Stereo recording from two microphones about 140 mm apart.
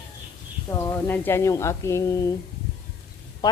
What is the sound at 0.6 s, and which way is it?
A woman's voice, 15° left (ahead or behind).